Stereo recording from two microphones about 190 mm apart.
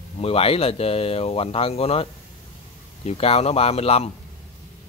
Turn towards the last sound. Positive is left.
turn(degrees=30)  # may be behind; listen again after turning